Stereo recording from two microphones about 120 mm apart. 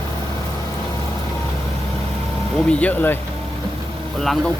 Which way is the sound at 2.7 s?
10° left (ahead or behind).